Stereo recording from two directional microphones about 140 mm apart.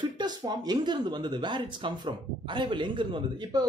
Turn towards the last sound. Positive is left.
turn(degrees=-30)  # may be behind; listen again after turning